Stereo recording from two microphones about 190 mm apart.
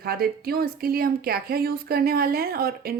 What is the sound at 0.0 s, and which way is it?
A woman's voice, 55° right (ahead or behind).